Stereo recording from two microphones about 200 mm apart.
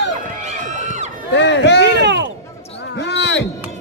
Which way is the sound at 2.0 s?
60° right (ahead or behind).